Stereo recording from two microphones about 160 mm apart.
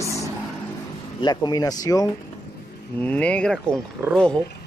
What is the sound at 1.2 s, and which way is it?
Speech, 25° left (ahead or behind).